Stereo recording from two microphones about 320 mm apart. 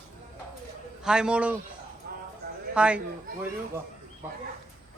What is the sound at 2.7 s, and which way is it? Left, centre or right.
Speech, centre.